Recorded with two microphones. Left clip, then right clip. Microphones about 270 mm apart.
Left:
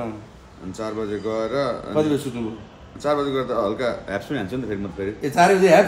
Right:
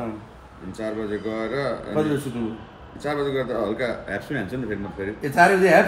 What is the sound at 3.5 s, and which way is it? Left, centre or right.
Speech, centre.